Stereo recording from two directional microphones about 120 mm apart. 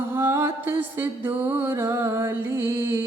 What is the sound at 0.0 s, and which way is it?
Music, 20° right (ahead or behind).